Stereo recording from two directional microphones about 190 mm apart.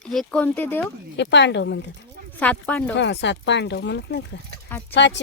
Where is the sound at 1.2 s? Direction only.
65° left (ahead or behind).